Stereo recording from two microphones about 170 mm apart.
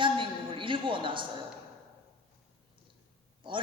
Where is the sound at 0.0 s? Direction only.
30° right (ahead or behind).